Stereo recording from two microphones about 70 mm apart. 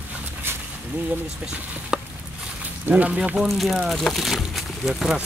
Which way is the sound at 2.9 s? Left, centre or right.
Centre.